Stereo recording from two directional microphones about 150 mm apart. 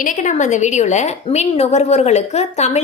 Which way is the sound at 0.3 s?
55° left (ahead or behind).